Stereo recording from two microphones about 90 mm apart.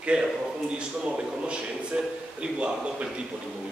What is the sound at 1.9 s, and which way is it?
Speech, 10° right (ahead or behind).